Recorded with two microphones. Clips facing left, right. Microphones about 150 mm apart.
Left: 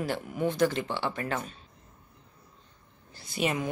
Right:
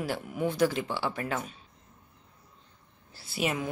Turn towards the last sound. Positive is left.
turn(degrees=-5)  # may be behind; listen again after turning